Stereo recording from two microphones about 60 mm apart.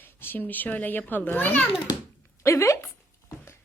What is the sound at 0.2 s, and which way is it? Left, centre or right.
Speech, left.